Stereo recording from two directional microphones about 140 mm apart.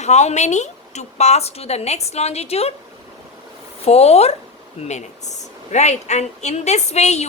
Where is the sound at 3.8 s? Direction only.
50° left (ahead or behind).